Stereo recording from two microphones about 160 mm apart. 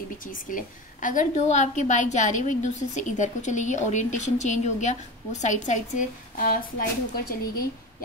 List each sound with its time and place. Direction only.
0.2 s a woman's voice: 55° left (ahead or behind)